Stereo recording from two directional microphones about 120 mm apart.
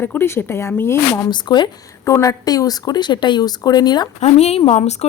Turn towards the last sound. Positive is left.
turn(degrees=60)  # may be behind; listen again after turning